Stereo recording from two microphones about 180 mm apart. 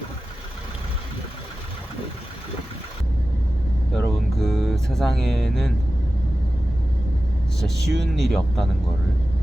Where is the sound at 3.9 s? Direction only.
Centre (ahead or behind).